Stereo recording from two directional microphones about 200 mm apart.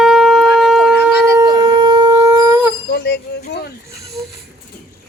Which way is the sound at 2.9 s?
55° left (ahead or behind).